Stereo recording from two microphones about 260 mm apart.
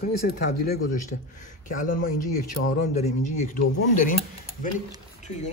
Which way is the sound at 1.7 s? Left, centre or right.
Left.